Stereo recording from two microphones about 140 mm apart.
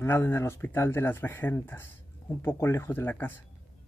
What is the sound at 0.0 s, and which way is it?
Speech, 15° left (ahead or behind).